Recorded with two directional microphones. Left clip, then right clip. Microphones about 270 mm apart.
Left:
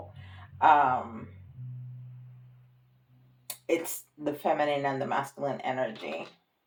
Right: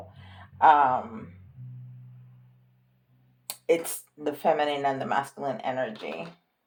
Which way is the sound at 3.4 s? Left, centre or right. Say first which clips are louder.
Right 5 dB; right.